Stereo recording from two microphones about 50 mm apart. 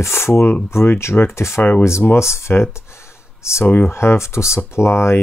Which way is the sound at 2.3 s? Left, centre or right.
Left.